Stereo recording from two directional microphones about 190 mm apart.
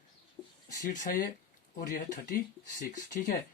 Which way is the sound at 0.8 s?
40° left (ahead or behind).